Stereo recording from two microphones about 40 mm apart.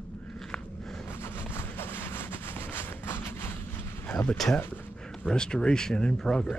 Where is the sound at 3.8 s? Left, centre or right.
Left.